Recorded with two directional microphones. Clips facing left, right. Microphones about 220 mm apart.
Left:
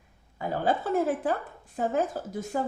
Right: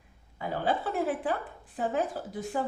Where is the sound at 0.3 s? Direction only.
45° left (ahead or behind).